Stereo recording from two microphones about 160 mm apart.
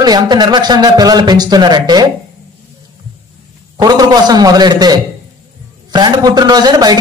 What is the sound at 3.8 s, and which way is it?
A man's voice, 25° right (ahead or behind).